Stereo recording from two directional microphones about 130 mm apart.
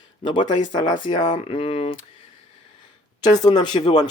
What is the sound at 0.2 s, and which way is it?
Speech, 35° left (ahead or behind).